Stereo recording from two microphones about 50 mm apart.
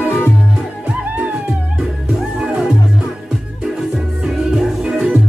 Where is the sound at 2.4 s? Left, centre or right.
Centre.